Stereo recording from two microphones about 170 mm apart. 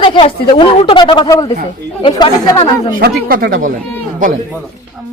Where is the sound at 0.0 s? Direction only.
30° left (ahead or behind).